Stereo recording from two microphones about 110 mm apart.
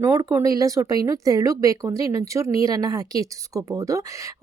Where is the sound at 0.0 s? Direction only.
30° right (ahead or behind).